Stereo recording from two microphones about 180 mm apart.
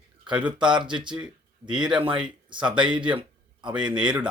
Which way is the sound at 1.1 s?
5° right (ahead or behind).